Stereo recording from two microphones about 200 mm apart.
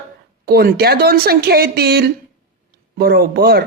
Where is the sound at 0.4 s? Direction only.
50° right (ahead or behind).